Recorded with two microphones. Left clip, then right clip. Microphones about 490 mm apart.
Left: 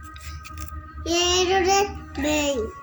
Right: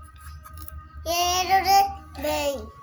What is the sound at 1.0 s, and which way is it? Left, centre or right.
Child singing, right.